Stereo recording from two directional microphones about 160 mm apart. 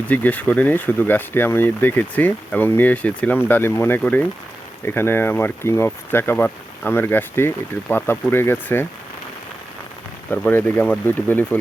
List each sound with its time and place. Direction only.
0.1 s speech: 10° left (ahead or behind)
10.2 s speech: 10° left (ahead or behind)